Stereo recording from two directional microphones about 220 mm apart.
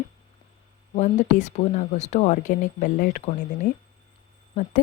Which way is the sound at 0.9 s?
30° left (ahead or behind).